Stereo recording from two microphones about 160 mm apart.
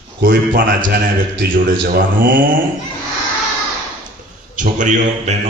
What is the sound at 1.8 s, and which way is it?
Mantra, 65° right (ahead or behind).